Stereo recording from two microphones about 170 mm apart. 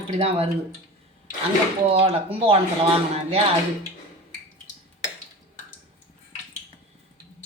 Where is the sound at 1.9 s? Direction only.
35° right (ahead or behind).